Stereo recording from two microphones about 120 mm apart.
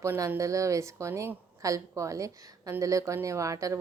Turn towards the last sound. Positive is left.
turn(degrees=-25)  # may be behind; listen again after turning